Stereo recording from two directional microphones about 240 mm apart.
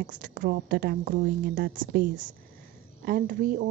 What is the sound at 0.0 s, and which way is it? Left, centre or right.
A woman's voice, right.